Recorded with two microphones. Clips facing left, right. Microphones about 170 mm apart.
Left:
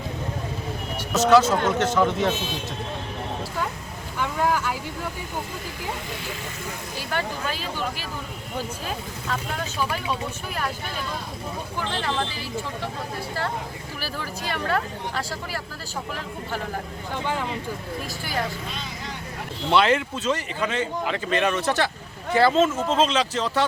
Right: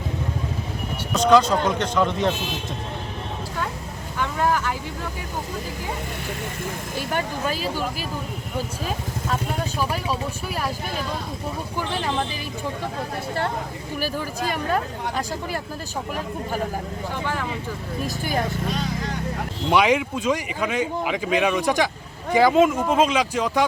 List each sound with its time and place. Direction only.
1.1 s speech: 5° left (ahead or behind)
4.2 s vehicle: 10° left (ahead or behind)
11.9 s speech: 15° right (ahead or behind)
14.5 s speech: 15° right (ahead or behind)
19.7 s speech: 10° right (ahead or behind)